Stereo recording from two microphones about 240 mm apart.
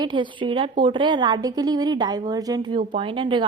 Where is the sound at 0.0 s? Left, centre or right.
Centre.